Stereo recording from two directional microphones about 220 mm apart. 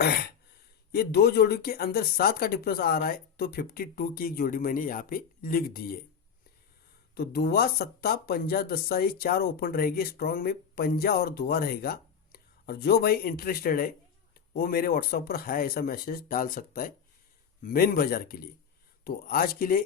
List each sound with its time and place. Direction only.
0.9 s speech: 45° left (ahead or behind)
7.1 s speech: 45° left (ahead or behind)